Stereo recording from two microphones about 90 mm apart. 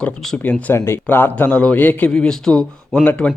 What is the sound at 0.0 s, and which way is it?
Speech, 5° left (ahead or behind).